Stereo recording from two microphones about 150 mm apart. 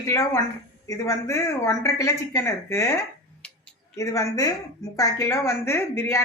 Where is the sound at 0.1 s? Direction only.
20° left (ahead or behind).